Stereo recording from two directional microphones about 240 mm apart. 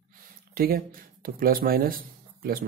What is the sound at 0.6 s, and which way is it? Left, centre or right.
Speech, right.